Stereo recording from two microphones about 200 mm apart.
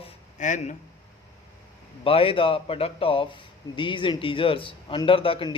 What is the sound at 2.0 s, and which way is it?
Speech, 25° left (ahead or behind).